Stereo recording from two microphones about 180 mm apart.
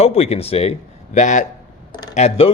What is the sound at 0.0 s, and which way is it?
A man's voice, 35° left (ahead or behind).